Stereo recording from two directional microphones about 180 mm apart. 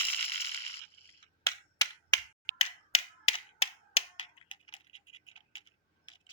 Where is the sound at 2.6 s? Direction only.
35° left (ahead or behind).